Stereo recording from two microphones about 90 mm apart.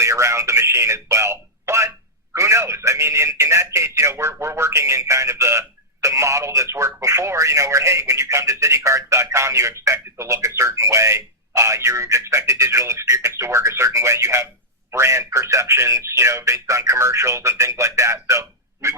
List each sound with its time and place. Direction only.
0.0 s speech: 35° right (ahead or behind)